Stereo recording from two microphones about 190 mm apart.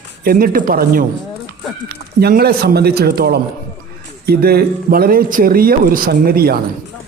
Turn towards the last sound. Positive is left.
turn(degrees=-55)  # may be behind; listen again after turning